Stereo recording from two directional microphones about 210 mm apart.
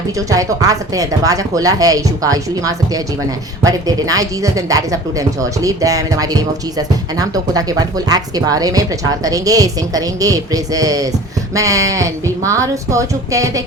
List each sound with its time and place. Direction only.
0.2 s speech: 15° right (ahead or behind)